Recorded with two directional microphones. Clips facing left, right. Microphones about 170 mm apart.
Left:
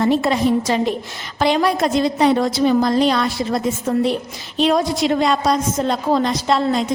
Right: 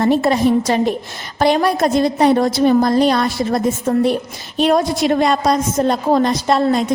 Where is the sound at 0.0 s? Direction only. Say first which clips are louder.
Right 2 dB; 45° right (ahead or behind).